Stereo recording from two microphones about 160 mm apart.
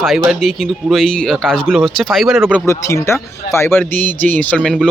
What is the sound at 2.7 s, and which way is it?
Speech, 20° left (ahead or behind).